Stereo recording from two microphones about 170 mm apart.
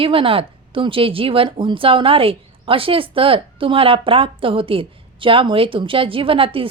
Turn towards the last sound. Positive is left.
turn(degrees=-30)  # may be behind; listen again after turning